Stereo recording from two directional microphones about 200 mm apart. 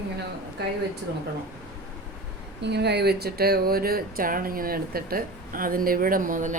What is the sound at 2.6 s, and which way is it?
Speech, 55° right (ahead or behind).